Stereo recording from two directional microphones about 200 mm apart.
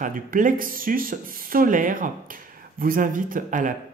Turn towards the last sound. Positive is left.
turn(degrees=-40)  # may be behind; listen again after turning